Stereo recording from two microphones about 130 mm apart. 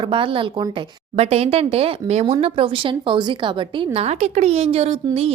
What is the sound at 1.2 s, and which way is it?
Speech, 55° right (ahead or behind).